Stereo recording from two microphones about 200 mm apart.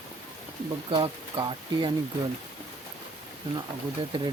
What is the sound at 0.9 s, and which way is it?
Speech, 25° right (ahead or behind).